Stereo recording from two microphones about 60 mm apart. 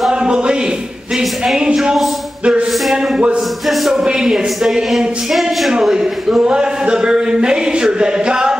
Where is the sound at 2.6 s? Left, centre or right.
Centre.